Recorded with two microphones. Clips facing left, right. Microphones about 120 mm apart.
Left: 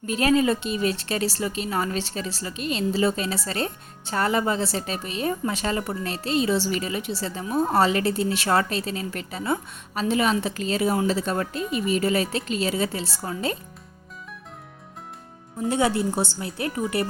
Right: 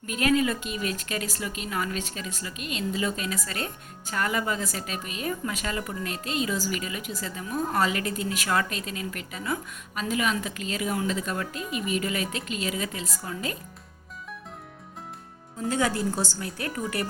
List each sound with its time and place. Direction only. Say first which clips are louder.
0.0 s a woman's voice: left 3 dB; 30° left (ahead or behind)
15.7 s a woman's voice: left 4 dB; 25° left (ahead or behind)